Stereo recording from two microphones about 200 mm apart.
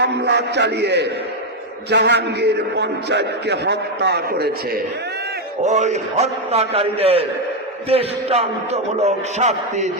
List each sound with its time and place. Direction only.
0.0 s a man's voice: 55° right (ahead or behind)
5.6 s speech: 35° right (ahead or behind)